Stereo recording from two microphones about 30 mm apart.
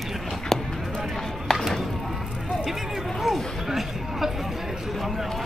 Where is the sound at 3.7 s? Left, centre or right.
Centre.